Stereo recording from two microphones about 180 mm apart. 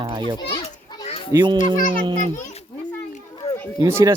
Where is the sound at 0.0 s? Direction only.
25° right (ahead or behind).